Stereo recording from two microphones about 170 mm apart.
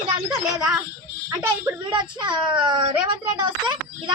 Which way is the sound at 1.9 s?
25° right (ahead or behind).